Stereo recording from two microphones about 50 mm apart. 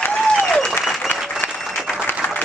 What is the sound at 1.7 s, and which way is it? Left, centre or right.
Applause, centre.